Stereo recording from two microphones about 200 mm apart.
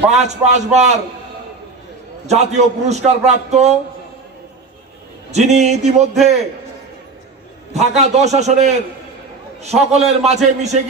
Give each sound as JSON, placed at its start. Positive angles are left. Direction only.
{"t": 0.1, "sound": "a man's voice", "side_deg": -35}
{"t": 2.2, "sound": "a man's voice", "side_deg": -35}
{"t": 5.3, "sound": "a man's voice", "side_deg": -35}
{"t": 7.7, "sound": "a man's voice", "side_deg": -35}